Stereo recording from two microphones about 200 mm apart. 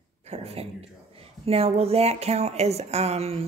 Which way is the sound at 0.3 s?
30° right (ahead or behind).